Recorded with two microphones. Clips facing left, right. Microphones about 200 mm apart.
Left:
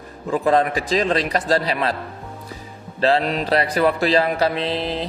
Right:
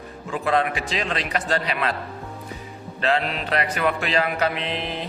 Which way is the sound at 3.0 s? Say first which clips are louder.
Left 5 dB; 35° left (ahead or behind).